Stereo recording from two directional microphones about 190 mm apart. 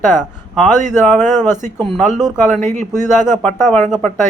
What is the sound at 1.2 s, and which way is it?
Speech, 40° right (ahead or behind).